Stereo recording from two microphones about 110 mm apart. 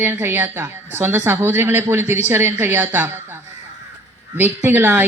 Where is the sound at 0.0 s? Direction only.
20° right (ahead or behind).